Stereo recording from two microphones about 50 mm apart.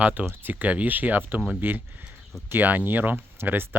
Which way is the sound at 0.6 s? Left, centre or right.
Right.